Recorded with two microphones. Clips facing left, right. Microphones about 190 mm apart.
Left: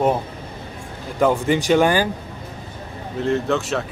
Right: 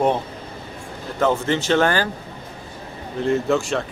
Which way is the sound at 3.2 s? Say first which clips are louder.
Right 1 dB; centre (ahead or behind).